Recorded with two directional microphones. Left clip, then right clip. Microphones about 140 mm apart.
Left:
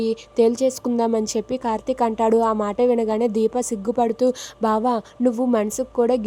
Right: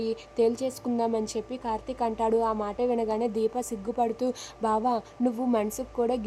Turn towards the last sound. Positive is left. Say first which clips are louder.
# left 8 dB
turn(degrees=45)  # may be behind; listen again after turning